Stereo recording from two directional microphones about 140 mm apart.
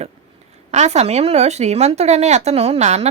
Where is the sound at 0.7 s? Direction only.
50° right (ahead or behind).